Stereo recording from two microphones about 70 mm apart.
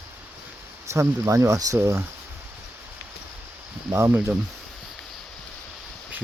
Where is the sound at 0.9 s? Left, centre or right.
Right.